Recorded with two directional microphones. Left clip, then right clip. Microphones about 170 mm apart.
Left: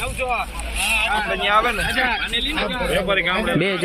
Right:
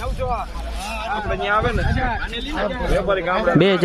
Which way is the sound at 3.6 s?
35° right (ahead or behind).